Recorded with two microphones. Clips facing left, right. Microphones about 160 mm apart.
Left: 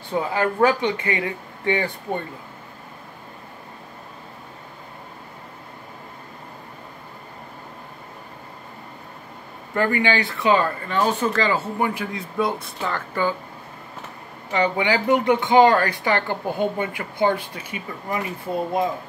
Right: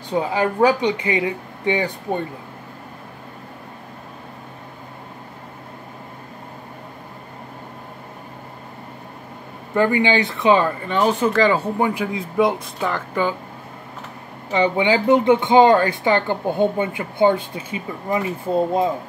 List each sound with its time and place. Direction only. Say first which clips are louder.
0.1 s speech: right 2 dB; 20° right (ahead or behind)
9.8 s speech: right 4 dB; 20° right (ahead or behind)
14.5 s speech: right 3 dB; 20° right (ahead or behind)